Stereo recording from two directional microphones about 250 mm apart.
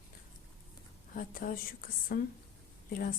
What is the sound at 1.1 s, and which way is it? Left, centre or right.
A woman's voice, left.